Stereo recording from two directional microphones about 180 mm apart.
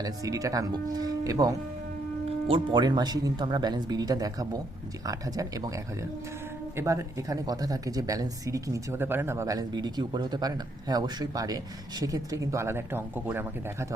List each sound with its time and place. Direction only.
0.0 s speech: 20° right (ahead or behind)